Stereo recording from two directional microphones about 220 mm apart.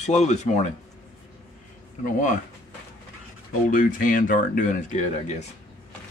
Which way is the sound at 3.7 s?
40° left (ahead or behind).